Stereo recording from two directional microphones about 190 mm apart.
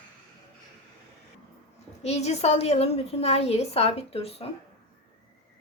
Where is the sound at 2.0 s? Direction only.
35° left (ahead or behind).